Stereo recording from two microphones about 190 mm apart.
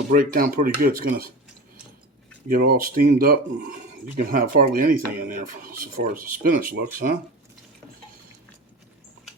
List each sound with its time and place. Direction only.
0.1 s speech: 50° right (ahead or behind)
2.5 s speech: 50° right (ahead or behind)